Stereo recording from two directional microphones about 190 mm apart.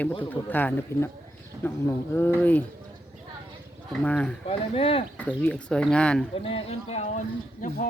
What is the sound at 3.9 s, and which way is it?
Speech, 5° left (ahead or behind).